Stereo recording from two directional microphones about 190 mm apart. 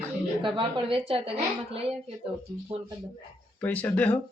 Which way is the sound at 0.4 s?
25° right (ahead or behind).